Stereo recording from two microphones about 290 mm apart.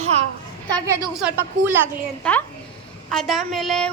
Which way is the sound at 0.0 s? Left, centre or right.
Right.